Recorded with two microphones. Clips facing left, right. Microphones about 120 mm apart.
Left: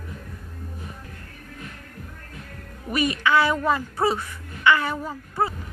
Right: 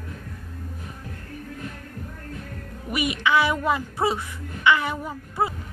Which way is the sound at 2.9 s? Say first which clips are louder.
Left 1 dB; 15° right (ahead or behind).